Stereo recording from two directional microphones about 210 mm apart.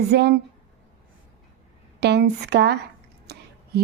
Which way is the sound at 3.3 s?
50° right (ahead or behind).